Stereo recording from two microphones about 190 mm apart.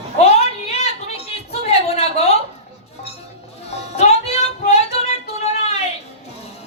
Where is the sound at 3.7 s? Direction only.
35° left (ahead or behind).